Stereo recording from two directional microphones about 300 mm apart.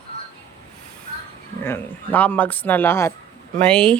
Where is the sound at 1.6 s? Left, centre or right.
Centre.